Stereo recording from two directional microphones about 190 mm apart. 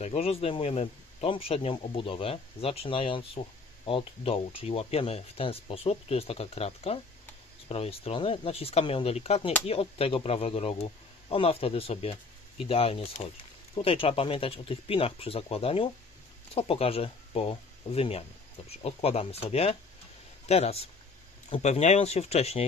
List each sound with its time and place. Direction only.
0.0 s speech: 35° left (ahead or behind)